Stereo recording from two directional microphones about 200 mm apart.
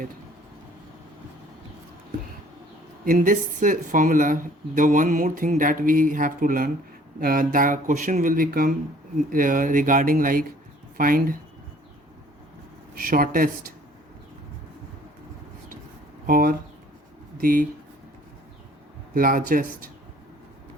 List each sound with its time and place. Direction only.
3.0 s speech: 40° right (ahead or behind)
12.9 s speech: 45° right (ahead or behind)
16.2 s speech: 45° right (ahead or behind)
19.1 s speech: 45° right (ahead or behind)